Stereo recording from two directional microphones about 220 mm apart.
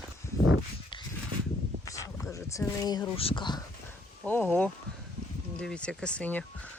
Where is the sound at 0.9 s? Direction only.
20° left (ahead or behind).